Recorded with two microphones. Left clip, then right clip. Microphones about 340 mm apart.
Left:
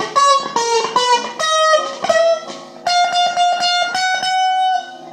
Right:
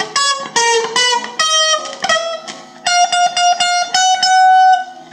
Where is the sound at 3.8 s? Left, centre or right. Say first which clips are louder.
Right 4 dB; right.